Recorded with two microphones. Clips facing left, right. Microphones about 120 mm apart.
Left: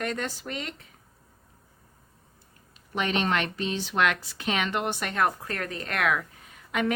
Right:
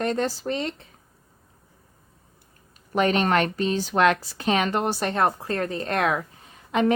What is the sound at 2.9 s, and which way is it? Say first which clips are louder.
A woman's voice: right 6 dB; 40° right (ahead or behind).